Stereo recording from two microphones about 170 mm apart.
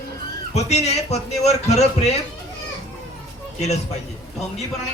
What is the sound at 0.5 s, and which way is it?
A man's voice, 40° left (ahead or behind).